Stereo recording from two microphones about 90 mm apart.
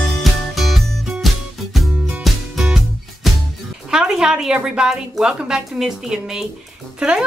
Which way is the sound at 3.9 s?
5° right (ahead or behind).